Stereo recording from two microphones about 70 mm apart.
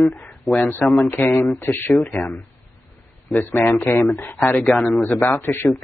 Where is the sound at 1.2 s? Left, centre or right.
Left.